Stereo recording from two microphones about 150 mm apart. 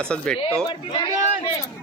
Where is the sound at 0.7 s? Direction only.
30° left (ahead or behind).